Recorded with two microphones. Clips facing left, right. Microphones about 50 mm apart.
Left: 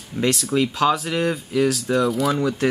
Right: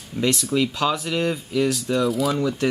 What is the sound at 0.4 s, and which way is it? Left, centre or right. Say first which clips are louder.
Speech: left 2 dB; centre.